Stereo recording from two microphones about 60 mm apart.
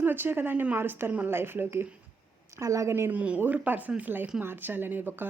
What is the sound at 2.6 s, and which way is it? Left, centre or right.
Speech, right.